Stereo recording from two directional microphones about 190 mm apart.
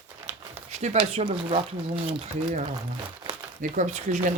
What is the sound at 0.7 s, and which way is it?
Speech, 35° right (ahead or behind).